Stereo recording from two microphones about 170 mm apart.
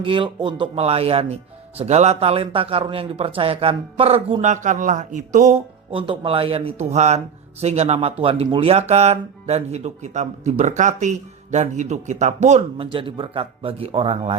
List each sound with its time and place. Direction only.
0.0 s a man's voice: 30° right (ahead or behind)
12.7 s a man's voice: 30° right (ahead or behind)